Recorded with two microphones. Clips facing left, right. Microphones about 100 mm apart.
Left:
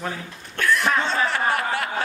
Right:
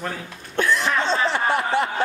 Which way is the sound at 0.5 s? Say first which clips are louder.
Even; 25° right (ahead or behind).